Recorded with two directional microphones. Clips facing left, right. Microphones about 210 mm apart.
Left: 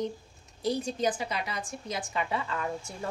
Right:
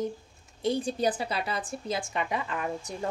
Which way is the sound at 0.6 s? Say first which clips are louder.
Right 2 dB; 30° right (ahead or behind).